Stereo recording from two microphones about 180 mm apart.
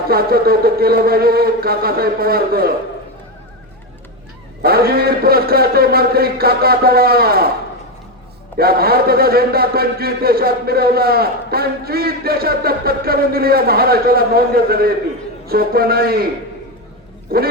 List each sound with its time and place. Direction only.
0.1 s a man's voice: 55° right (ahead or behind)
4.6 s a man's voice: 60° right (ahead or behind)
8.5 s a man's voice: 55° right (ahead or behind)
17.3 s a man's voice: 55° right (ahead or behind)